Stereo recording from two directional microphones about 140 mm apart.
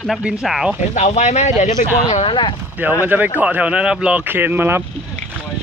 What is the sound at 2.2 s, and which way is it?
Speech, 35° left (ahead or behind).